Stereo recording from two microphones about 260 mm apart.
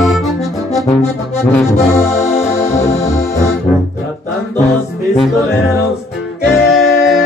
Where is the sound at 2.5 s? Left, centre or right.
Centre.